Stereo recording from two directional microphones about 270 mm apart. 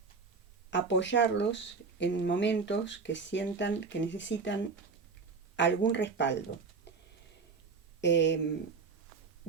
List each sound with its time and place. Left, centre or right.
0.7 s speech: left
8.0 s speech: left